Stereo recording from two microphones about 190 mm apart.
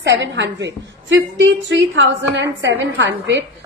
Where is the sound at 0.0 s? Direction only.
65° right (ahead or behind).